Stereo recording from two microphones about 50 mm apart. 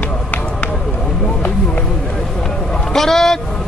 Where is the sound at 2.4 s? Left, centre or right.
Centre.